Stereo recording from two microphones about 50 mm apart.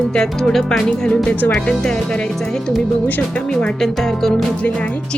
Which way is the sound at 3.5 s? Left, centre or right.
Centre.